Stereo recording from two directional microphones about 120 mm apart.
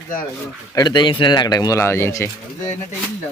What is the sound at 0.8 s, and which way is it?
Speech, 40° left (ahead or behind).